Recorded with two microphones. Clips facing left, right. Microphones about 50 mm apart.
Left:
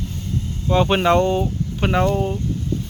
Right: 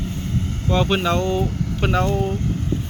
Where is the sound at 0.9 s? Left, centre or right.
Left.